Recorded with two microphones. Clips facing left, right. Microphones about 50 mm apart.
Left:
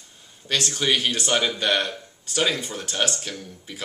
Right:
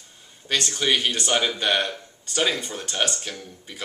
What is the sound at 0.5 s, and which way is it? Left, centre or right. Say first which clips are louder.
Speech: even; centre.